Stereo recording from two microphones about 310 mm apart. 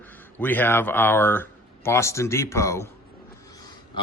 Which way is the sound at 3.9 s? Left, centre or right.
Centre.